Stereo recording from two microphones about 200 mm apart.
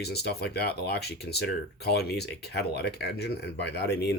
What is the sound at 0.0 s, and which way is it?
Speech, 55° left (ahead or behind).